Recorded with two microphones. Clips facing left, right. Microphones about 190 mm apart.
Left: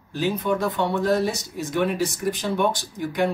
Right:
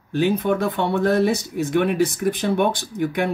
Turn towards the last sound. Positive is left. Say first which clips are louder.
# right 1 dB
turn(degrees=-60)  # may be behind; listen again after turning